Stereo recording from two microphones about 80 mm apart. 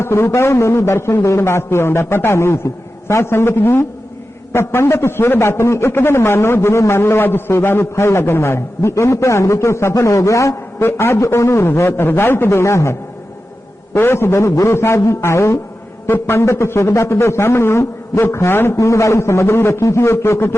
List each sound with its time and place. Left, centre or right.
0.0 s a man's voice: left